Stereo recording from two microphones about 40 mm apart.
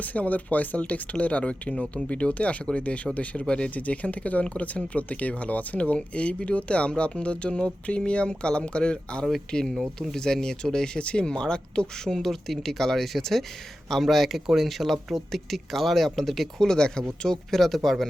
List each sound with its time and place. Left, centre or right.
0.0 s speech: left
3.8 s speech: left; by 16.5 s centre
16.6 s speech: centre
17.2 s speech: centre